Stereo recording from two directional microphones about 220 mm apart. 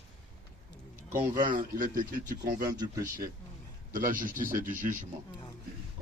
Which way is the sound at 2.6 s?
20° right (ahead or behind).